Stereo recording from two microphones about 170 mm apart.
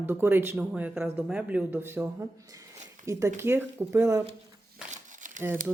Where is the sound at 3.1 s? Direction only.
20° right (ahead or behind).